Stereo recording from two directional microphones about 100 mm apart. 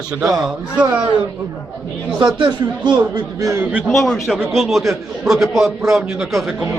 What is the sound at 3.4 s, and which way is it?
Speech, 30° right (ahead or behind).